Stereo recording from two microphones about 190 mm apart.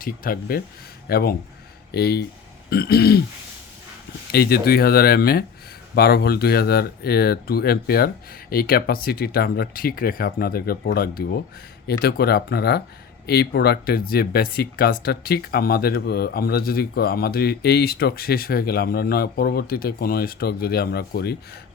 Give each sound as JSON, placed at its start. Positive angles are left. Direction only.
{"t": 0.0, "sound": "speech", "side_deg": 50}
{"t": 4.3, "sound": "speech", "side_deg": 55}